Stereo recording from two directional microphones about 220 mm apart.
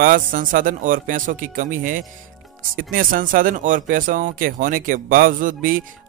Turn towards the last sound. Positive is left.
turn(degrees=-40)  # may be behind; listen again after turning